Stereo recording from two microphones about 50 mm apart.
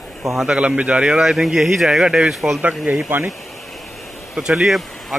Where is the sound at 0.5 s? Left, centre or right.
Right.